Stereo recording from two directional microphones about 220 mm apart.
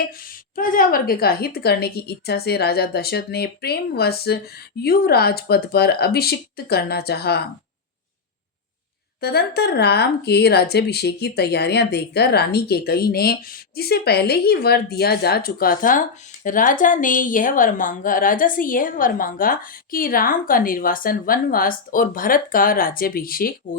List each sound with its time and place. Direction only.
0.5 s a woman's voice: 40° left (ahead or behind)
9.2 s speech: 45° left (ahead or behind)